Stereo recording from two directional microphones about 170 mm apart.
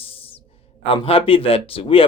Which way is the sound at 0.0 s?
35° left (ahead or behind).